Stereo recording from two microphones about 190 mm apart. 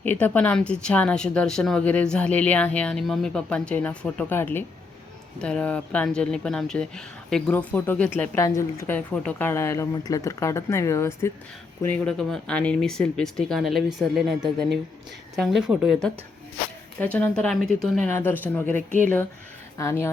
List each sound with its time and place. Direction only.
0.0 s speech: 10° left (ahead or behind)
8.4 s speech: 15° left (ahead or behind)